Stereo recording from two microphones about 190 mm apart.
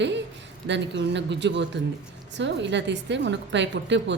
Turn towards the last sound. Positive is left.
turn(degrees=-70)  # may be behind; listen again after turning